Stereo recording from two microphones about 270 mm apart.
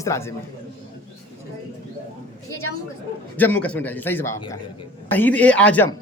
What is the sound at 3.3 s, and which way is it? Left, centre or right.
A man's voice, centre.